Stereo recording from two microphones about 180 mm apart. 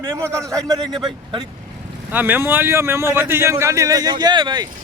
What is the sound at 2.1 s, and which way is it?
Speech, 10° right (ahead or behind).